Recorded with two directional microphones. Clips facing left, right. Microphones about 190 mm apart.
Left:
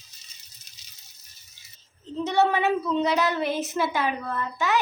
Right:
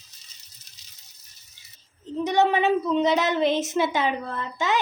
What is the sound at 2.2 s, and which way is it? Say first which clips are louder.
A child's voice: right 1 dB; 20° right (ahead or behind).